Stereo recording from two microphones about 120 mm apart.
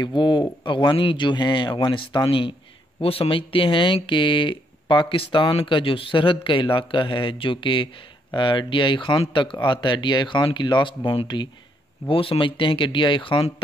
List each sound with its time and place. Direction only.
0.0 s speech: 40° left (ahead or behind)